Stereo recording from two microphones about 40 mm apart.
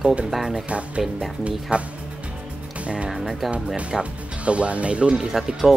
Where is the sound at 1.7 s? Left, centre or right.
Right.